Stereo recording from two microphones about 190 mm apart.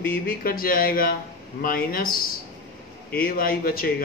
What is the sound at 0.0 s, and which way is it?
A man's voice, 50° left (ahead or behind).